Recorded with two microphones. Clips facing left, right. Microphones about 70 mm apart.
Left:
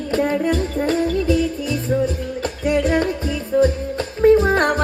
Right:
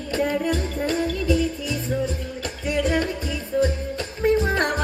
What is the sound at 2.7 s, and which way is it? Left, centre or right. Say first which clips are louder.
Music: left 5 dB; left.